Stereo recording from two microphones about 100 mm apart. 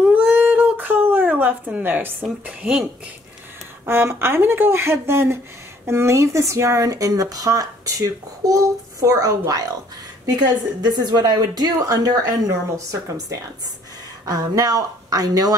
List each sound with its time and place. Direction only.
0.1 s a sound: 20° right (ahead or behind)
2.4 s speech: 15° right (ahead or behind)
3.8 s speech: 25° right (ahead or behind)
10.8 s speech: 45° right (ahead or behind)